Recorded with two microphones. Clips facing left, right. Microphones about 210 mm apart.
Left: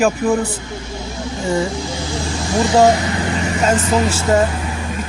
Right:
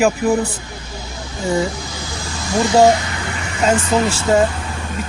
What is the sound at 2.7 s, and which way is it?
Speech, 25° right (ahead or behind).